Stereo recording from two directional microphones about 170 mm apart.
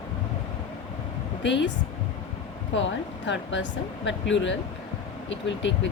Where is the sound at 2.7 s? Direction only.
90° left.